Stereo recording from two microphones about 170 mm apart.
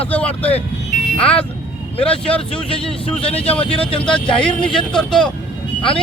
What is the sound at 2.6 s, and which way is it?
Speech, 30° left (ahead or behind).